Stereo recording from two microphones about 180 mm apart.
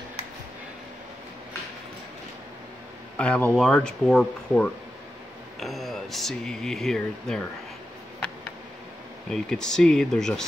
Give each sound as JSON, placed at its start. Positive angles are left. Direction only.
{"t": 3.2, "sound": "speech", "side_deg": 5}
{"t": 9.3, "sound": "speech", "side_deg": 5}